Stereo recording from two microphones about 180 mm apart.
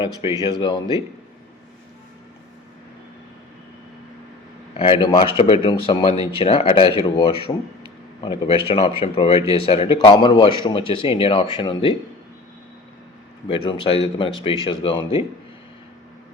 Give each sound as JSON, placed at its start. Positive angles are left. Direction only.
{"t": 0.2, "sound": "speech", "side_deg": -15}
{"t": 0.6, "sound": "speech", "side_deg": 25}
{"t": 4.7, "sound": "speech", "side_deg": 30}
{"t": 13.5, "sound": "speech", "side_deg": 30}